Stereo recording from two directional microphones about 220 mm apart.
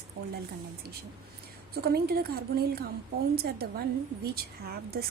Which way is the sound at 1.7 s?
45° right (ahead or behind).